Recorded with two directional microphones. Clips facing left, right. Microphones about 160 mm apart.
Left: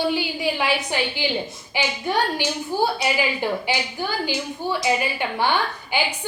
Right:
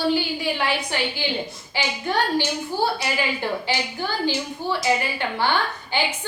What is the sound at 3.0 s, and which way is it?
A woman's voice, 15° left (ahead or behind).